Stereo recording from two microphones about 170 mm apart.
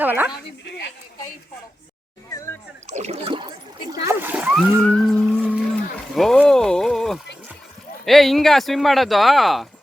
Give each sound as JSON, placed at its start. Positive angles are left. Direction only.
{"t": 0.0, "sound": "a woman's voice", "side_deg": -10}
{"t": 2.8, "sound": "speech", "side_deg": -40}
{"t": 4.0, "sound": "speech", "side_deg": -10}
{"t": 4.8, "sound": "speech", "side_deg": 5}